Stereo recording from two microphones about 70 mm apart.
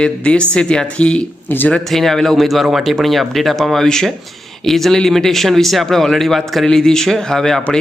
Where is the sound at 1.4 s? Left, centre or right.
Left.